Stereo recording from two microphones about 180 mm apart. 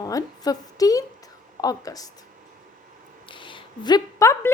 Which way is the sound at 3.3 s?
25° left (ahead or behind).